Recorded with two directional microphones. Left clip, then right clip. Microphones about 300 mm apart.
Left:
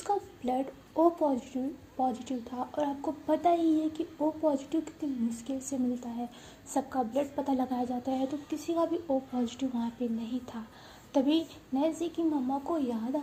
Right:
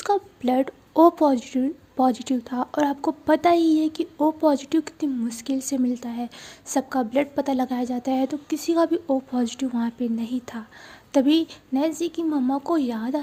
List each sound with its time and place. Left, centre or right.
0.0 s a woman's voice: right